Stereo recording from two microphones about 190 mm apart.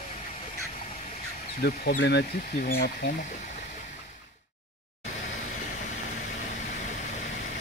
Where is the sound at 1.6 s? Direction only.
60° left (ahead or behind).